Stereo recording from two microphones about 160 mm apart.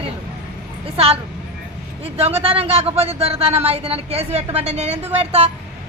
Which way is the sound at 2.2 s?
40° right (ahead or behind).